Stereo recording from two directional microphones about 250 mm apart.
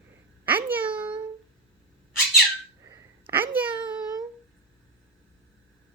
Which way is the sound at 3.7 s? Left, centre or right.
Centre.